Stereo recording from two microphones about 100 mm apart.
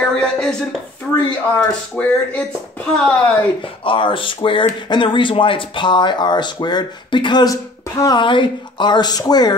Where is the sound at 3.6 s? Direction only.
60° left (ahead or behind); by 8.2 s 35° left (ahead or behind).